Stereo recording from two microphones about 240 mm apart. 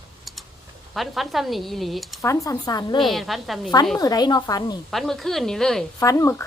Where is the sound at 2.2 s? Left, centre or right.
Centre.